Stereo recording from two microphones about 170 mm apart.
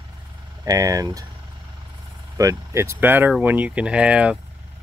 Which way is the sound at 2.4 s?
20° right (ahead or behind).